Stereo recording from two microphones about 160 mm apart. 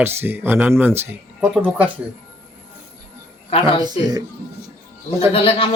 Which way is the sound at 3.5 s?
35° left (ahead or behind).